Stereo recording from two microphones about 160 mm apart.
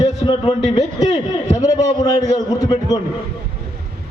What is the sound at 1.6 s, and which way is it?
A man's voice, 25° left (ahead or behind).